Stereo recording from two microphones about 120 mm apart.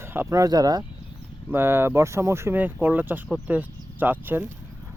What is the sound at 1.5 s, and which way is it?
Speech, 20° right (ahead or behind).